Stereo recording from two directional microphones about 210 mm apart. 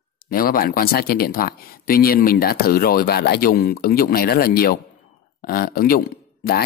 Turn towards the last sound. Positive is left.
turn(degrees=45)  # may be behind; listen again after turning